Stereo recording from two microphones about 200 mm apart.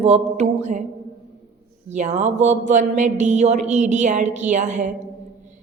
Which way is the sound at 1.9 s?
35° right (ahead or behind).